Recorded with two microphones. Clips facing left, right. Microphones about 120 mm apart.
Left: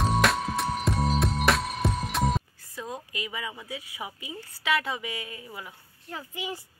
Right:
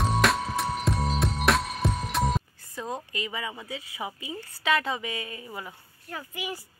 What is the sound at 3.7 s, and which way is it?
Speech, 10° left (ahead or behind).